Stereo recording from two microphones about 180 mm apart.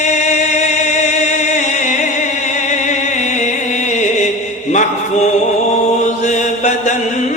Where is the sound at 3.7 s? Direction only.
40° left (ahead or behind).